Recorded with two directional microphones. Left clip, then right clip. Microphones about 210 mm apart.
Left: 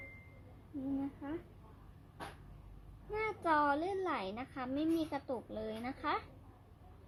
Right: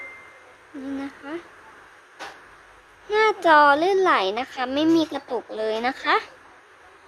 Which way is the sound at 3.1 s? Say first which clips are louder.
Right 17 dB; 30° right (ahead or behind).